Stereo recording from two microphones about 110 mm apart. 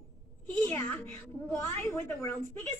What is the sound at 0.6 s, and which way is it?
A woman's voice, 15° left (ahead or behind).